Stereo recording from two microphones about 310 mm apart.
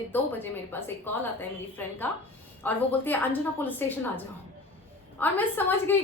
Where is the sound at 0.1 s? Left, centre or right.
Centre.